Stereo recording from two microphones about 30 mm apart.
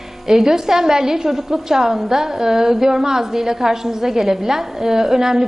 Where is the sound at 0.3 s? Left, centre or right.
Centre.